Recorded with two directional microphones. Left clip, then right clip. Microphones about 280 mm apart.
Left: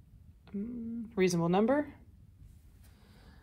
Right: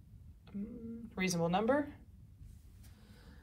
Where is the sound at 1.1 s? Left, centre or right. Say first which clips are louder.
Left 5 dB; left.